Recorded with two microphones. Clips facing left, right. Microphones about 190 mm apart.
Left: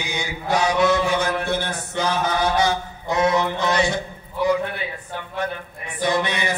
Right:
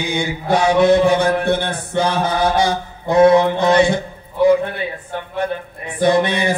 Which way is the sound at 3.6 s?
55° right (ahead or behind).